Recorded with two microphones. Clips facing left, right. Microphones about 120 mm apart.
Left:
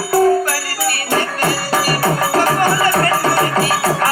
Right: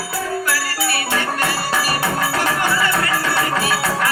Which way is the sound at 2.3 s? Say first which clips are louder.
Left 6 dB; 40° left (ahead or behind).